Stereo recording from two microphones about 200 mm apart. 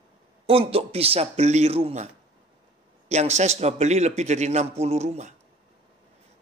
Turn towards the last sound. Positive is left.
turn(degrees=-35)  # may be behind; listen again after turning